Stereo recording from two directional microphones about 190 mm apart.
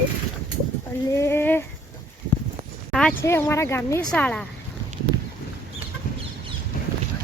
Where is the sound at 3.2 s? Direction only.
15° left (ahead or behind).